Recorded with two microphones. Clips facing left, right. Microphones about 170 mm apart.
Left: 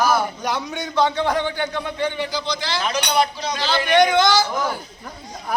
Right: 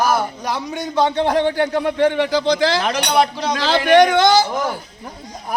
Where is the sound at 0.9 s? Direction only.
20° right (ahead or behind).